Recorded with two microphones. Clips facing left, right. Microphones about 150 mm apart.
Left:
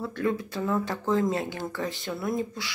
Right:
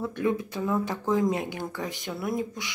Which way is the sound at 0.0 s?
15° right (ahead or behind).